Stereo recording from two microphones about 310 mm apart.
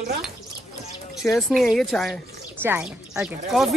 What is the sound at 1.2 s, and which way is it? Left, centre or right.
Speech, centre.